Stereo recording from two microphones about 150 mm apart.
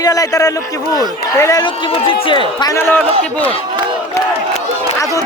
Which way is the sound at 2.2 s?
35° left (ahead or behind).